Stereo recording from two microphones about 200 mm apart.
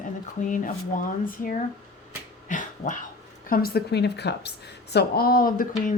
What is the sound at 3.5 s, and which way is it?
Speech, 50° left (ahead or behind).